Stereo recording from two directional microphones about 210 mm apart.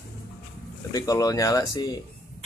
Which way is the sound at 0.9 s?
15° left (ahead or behind).